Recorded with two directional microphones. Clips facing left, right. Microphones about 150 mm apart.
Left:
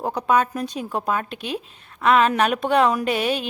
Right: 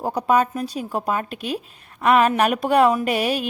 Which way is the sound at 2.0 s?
10° right (ahead or behind).